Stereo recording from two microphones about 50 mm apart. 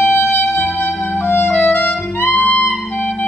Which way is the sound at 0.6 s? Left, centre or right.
Left.